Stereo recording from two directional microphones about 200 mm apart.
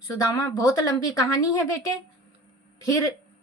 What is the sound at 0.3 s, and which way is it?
Female singing, 15° left (ahead or behind).